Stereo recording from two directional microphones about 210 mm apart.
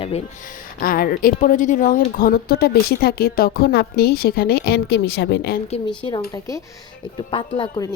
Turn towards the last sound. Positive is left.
turn(degrees=20)  # may be behind; listen again after turning